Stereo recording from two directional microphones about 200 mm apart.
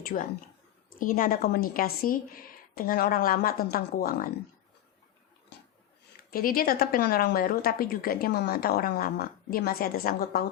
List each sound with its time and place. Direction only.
0.0 s a woman's voice: 40° left (ahead or behind)
6.3 s a woman's voice: 45° left (ahead or behind)